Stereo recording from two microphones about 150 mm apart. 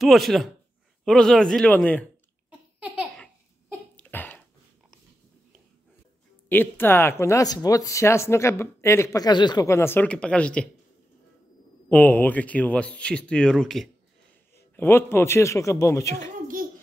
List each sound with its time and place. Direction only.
0.0 s speech: centre (ahead or behind)
3.9 s cough: 10° left (ahead or behind)
6.5 s speech: 15° left (ahead or behind)
11.9 s speech: 10° left (ahead or behind)
14.8 s speech: 15° left (ahead or behind)